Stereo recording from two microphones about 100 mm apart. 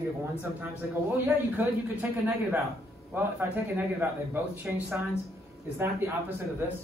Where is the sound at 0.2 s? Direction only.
20° right (ahead or behind).